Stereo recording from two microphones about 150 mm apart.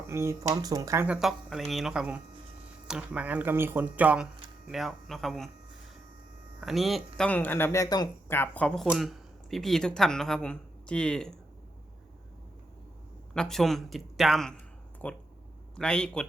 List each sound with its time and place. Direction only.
0.1 s speech: 20° right (ahead or behind)
1.0 s speech: 5° right (ahead or behind)
6.6 s speech: centre (ahead or behind)
7.3 s speech: 10° left (ahead or behind)
8.3 s speech: 10° left (ahead or behind)
13.3 s speech: 5° left (ahead or behind)